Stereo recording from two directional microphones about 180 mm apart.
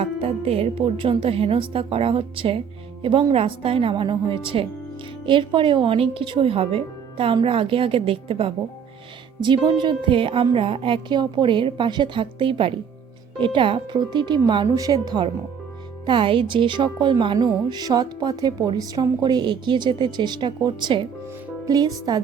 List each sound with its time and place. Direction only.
0.0 s a woman's voice: 35° right (ahead or behind)